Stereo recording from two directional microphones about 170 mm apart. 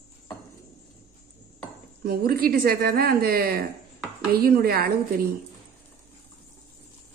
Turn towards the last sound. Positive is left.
turn(degrees=-60)  # may be behind; listen again after turning